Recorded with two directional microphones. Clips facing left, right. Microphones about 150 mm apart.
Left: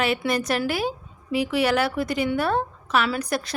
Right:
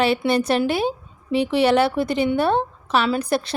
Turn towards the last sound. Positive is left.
turn(degrees=-30)  # may be behind; listen again after turning